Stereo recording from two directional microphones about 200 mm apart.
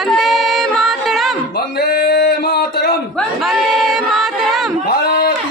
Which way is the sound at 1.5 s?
50° left (ahead or behind).